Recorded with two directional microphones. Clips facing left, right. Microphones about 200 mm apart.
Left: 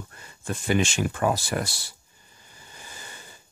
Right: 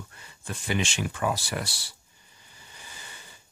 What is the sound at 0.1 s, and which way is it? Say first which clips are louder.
Speech: left 6 dB; 45° left (ahead or behind).